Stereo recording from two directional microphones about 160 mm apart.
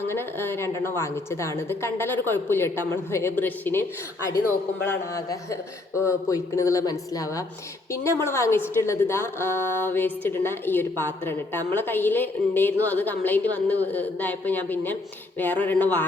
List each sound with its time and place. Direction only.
0.1 s a woman's voice: 15° left (ahead or behind)
4.9 s a woman's voice: 20° left (ahead or behind)